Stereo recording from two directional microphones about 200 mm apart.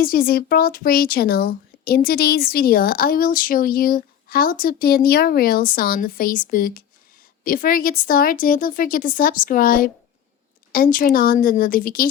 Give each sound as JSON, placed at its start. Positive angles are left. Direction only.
{"t": 0.0, "sound": "speech", "side_deg": 45}